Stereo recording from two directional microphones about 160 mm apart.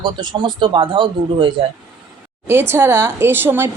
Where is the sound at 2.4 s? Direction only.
15° right (ahead or behind).